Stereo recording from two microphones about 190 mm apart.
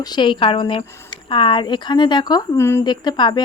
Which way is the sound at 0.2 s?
25° left (ahead or behind).